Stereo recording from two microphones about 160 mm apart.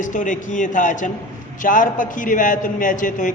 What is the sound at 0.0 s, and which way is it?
A man's voice, 50° left (ahead or behind).